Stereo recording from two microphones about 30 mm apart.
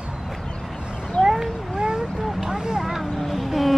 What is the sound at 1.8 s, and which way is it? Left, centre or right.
Vehicle, right.